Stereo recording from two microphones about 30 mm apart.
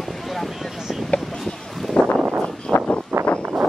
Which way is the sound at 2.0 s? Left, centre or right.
Left.